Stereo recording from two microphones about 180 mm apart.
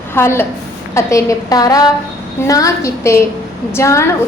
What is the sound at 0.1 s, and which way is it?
A woman's voice, 15° left (ahead or behind).